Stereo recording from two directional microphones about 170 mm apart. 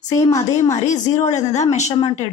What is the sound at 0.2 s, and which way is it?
Speech, 20° left (ahead or behind).